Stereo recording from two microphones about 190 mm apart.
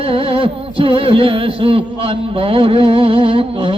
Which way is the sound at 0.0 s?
30° right (ahead or behind).